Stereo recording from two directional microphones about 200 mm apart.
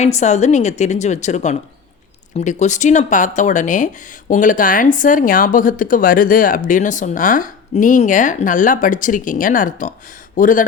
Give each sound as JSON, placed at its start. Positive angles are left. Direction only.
{"t": 0.0, "sound": "speech", "side_deg": 35}